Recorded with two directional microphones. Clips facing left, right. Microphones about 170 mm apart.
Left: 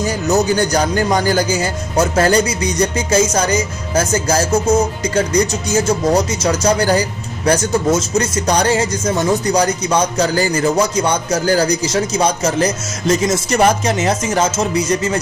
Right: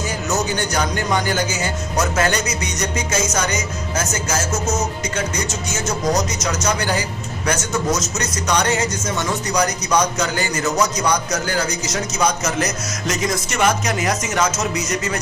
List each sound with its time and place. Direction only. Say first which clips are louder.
0.3 s speech: left 8 dB; 35° left (ahead or behind)